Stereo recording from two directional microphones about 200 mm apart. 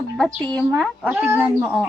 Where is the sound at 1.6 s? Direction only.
Centre (ahead or behind).